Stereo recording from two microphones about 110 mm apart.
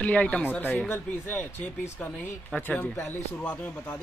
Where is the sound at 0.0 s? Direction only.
10° left (ahead or behind).